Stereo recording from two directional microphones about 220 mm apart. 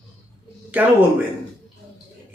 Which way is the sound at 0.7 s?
5° right (ahead or behind).